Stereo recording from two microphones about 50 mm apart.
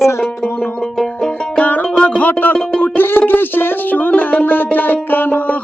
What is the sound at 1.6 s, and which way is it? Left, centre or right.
Music, left.